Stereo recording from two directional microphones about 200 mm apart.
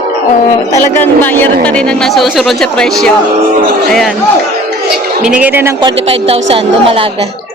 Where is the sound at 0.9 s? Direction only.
10° left (ahead or behind).